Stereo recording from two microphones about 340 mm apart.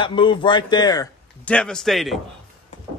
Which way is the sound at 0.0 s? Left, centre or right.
Centre.